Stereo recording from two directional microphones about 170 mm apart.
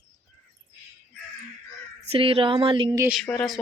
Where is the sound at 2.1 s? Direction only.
35° right (ahead or behind).